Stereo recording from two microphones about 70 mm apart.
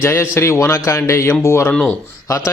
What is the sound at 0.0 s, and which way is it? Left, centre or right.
A man's voice, left.